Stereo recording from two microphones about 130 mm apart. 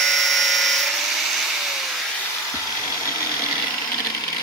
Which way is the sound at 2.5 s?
25° left (ahead or behind).